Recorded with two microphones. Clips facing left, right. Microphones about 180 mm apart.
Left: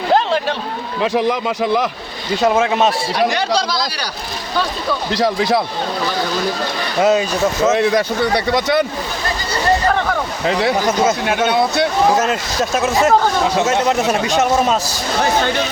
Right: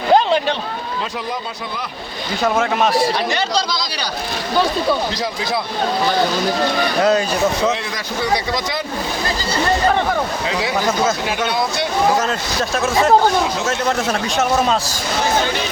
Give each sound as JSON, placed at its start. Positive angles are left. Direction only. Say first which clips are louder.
{"t": 0.1, "sound": "a sound", "louder": "right 2 dB", "side_deg": 0}
{"t": 1.0, "sound": "speech", "louder": "left 9 dB", "side_deg": 80}
{"t": 2.4, "sound": "speech", "louder": "left 3 dB", "side_deg": 25}
{"t": 7.0, "sound": "a man's voice", "louder": "left 3 dB", "side_deg": 5}
{"t": 7.7, "sound": "speech", "louder": "left 8 dB", "side_deg": 55}
{"t": 11.3, "sound": "speech", "louder": "left 4 dB", "side_deg": 60}
{"t": 13.8, "sound": "a man's voice", "louder": "left 3 dB", "side_deg": 10}